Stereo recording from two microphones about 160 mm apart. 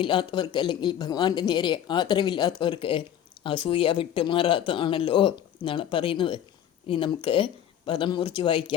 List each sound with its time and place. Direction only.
0.0 s speech: 30° left (ahead or behind)